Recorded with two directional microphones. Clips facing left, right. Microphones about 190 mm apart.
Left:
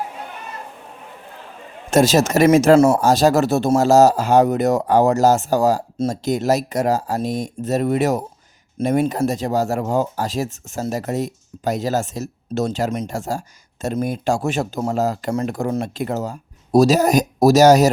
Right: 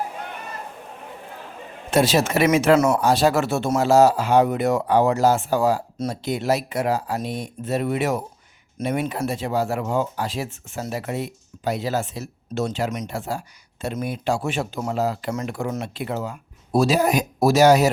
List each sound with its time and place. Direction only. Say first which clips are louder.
1.9 s speech: left 4 dB; 45° left (ahead or behind)
3.0 s speech: left 4 dB; 40° left (ahead or behind)